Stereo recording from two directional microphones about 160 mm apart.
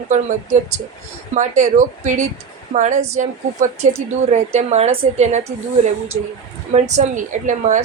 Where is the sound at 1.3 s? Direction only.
50° right (ahead or behind).